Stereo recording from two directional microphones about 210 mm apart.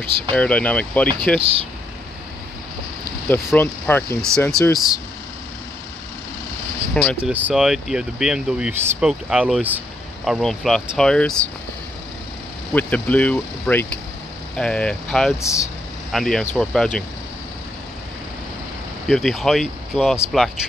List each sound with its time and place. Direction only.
0.3 s speech: 5° left (ahead or behind)
1.4 s speech: 25° right (ahead or behind)
3.5 s speech: 10° left (ahead or behind)
7.2 s speech: 5° right (ahead or behind)
12.7 s speech: 5° left (ahead or behind)
15.4 s speech: 15° left (ahead or behind)
16.1 s speech: centre (ahead or behind)
19.0 s speech: centre (ahead or behind)